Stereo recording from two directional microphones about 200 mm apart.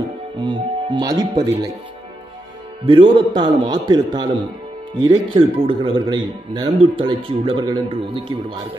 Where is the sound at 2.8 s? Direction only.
25° right (ahead or behind).